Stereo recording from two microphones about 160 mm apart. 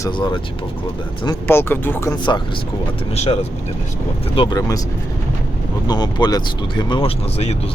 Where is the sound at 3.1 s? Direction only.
40° left (ahead or behind).